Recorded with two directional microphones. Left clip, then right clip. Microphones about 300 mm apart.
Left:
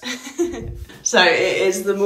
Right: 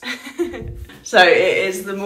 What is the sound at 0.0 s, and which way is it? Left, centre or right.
A woman's voice, centre.